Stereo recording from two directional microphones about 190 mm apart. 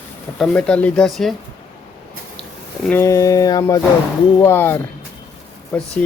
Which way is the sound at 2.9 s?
15° left (ahead or behind).